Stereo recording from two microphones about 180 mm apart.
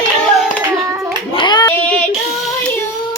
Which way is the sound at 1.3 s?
25° left (ahead or behind).